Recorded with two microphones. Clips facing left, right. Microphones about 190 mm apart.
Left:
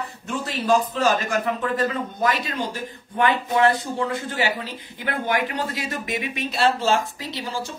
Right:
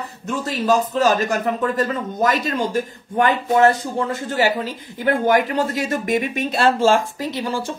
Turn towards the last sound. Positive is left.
turn(degrees=-55)  # may be behind; listen again after turning